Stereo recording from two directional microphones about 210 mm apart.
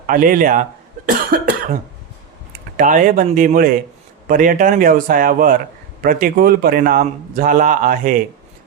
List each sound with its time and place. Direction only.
0.1 s a man's voice: 40° right (ahead or behind)
1.0 s cough: 45° right (ahead or behind)
2.7 s a man's voice: 40° right (ahead or behind)